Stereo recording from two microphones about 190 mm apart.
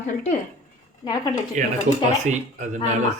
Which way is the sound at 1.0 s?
20° left (ahead or behind).